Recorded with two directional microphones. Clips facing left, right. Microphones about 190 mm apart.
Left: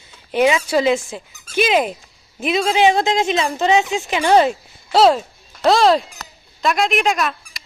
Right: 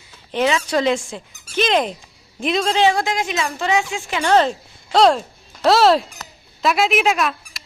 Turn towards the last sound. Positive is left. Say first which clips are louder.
# even
turn(degrees=0)  # may be behind; listen again after turning